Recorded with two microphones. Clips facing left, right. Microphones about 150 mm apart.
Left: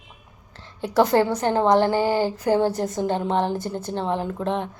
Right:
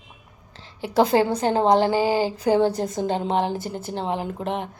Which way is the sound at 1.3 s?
25° right (ahead or behind).